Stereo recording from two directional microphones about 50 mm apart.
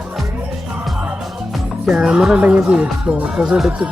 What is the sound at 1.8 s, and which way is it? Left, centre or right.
Speech, centre.